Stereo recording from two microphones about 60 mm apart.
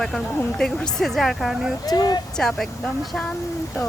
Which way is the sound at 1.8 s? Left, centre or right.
Left.